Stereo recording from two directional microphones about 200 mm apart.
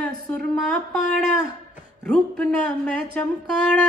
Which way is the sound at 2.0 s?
5° left (ahead or behind).